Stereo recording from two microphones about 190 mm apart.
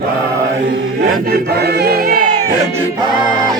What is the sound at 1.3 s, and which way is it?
Chant, 55° right (ahead or behind).